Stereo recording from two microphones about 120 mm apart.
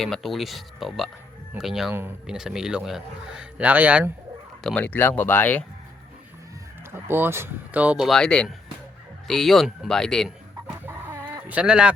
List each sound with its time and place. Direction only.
0.0 s a man's voice: centre (ahead or behind)
1.9 s speech: 20° right (ahead or behind)
2.2 s a man's voice: 5° right (ahead or behind)
4.6 s speech: 10° left (ahead or behind)
6.9 s a man's voice: 20° right (ahead or behind); by 10.3 s 5° left (ahead or behind)
10.8 s chicken: 20° right (ahead or behind)